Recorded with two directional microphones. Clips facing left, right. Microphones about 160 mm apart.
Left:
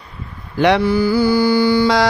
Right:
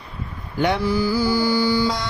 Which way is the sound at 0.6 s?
80° left.